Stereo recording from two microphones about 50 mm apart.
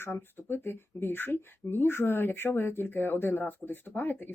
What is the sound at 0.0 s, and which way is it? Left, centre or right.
Speech, left.